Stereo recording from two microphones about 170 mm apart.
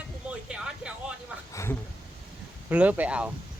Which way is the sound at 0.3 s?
5° right (ahead or behind).